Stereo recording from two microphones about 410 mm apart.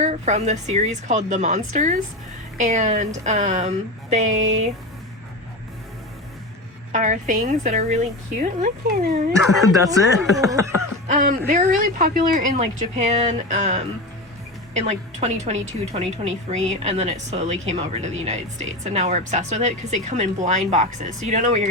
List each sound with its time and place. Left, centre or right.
0.0 s speech: centre
6.9 s speech: centre
9.3 s speech: centre
11.1 s speech: centre